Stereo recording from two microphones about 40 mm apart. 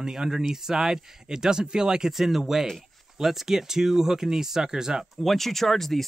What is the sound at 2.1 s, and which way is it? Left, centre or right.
Speech, centre.